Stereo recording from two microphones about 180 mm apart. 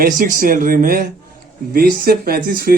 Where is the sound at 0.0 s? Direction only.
50° right (ahead or behind).